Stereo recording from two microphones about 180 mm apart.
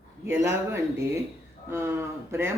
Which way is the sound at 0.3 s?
15° right (ahead or behind).